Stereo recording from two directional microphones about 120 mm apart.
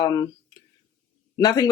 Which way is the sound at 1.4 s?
30° left (ahead or behind).